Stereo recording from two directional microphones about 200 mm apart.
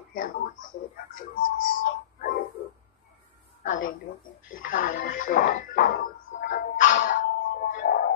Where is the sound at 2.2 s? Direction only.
45° left (ahead or behind).